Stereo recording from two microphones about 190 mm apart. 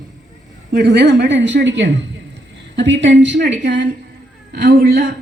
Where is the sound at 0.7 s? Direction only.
65° right (ahead or behind).